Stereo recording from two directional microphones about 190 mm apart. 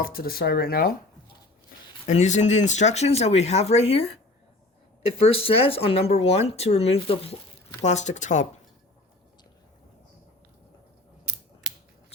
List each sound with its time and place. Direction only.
0.0 s speech: 50° left (ahead or behind)
2.0 s speech: 40° left (ahead or behind)
5.4 s speech: 30° left (ahead or behind)